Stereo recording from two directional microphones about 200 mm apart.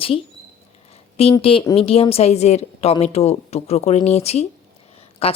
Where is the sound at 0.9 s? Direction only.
30° left (ahead or behind).